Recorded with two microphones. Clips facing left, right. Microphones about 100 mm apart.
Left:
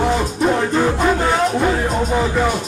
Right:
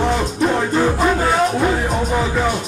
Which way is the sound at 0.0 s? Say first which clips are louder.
Left 1 dB; centre (ahead or behind).